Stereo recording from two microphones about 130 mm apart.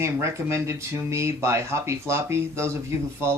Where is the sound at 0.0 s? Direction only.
20° right (ahead or behind).